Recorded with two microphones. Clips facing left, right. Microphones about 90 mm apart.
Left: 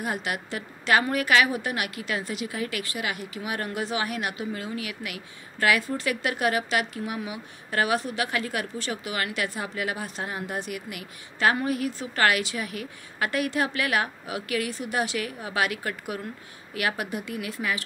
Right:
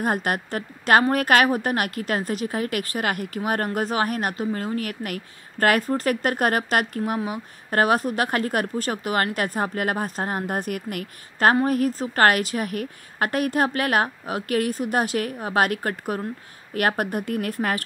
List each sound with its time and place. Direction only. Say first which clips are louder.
0.0 s a woman's voice: right 6 dB; 45° right (ahead or behind)